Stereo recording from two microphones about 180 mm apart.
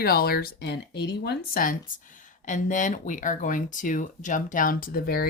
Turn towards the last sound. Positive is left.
turn(degrees=55)  # may be behind; listen again after turning